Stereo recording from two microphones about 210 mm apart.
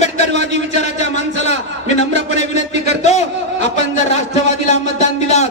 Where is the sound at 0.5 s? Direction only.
35° left (ahead or behind).